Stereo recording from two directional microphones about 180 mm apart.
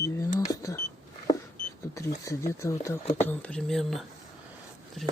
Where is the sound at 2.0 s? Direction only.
15° left (ahead or behind).